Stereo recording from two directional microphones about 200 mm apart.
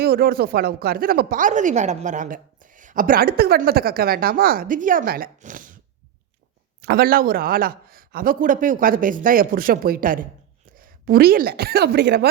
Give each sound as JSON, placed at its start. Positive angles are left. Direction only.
{"t": 0.0, "sound": "speech", "side_deg": -50}
{"t": 6.8, "sound": "a woman's voice", "side_deg": -50}